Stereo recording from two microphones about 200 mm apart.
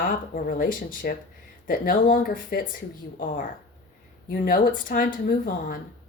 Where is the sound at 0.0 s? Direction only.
45° left (ahead or behind).